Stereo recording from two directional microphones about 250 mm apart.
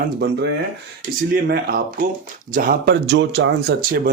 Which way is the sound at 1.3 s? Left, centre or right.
Right.